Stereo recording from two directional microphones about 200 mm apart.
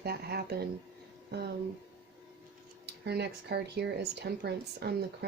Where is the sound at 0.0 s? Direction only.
50° right (ahead or behind).